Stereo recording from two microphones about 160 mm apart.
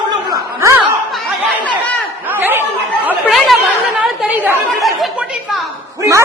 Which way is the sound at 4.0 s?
5° right (ahead or behind).